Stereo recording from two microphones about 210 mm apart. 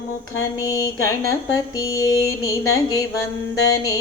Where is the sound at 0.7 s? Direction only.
15° left (ahead or behind).